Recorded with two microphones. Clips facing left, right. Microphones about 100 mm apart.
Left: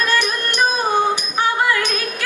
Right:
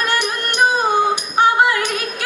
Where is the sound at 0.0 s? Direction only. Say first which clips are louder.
Left 1 dB; 20° right (ahead or behind).